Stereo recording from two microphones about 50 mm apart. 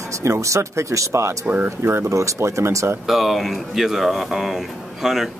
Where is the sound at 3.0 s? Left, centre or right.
Centre.